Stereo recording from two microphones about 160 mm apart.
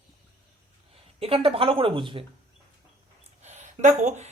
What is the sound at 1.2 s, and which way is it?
Speech, 35° right (ahead or behind).